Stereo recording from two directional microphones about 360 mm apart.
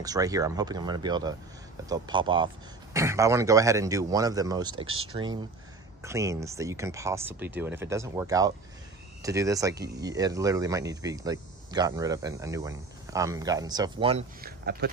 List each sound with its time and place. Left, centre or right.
0.0 s speech: centre
4.8 s speech: right
5.1 s speech: centre
14.6 s speech: right